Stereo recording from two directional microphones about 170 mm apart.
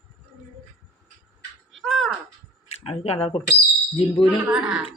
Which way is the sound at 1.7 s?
Centre (ahead or behind).